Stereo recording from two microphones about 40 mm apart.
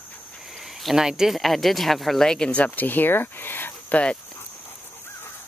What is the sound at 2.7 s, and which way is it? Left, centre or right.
Speech, left.